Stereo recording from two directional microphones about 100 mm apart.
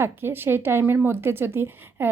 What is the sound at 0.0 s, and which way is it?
Speech, 25° right (ahead or behind).